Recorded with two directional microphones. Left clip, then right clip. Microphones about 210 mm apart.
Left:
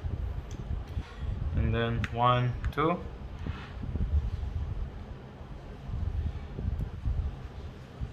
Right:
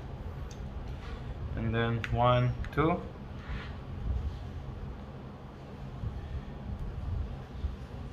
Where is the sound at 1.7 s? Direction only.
10° left (ahead or behind).